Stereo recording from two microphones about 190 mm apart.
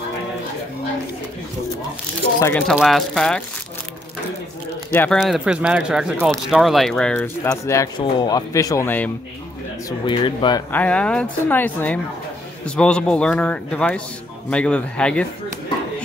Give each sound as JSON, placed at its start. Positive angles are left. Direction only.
{"t": 2.4, "sound": "chopping", "side_deg": 5}
{"t": 2.7, "sound": "a man's voice", "side_deg": 0}
{"t": 4.9, "sound": "chopping", "side_deg": 10}
{"t": 5.2, "sound": "a man's voice", "side_deg": -5}
{"t": 7.6, "sound": "chopping", "side_deg": 15}
{"t": 9.8, "sound": "speech", "side_deg": 25}
{"t": 10.7, "sound": "chopping", "side_deg": 5}
{"t": 12.6, "sound": "a man's voice", "side_deg": 5}